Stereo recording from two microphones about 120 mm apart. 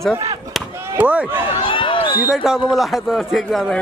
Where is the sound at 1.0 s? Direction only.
10° right (ahead or behind).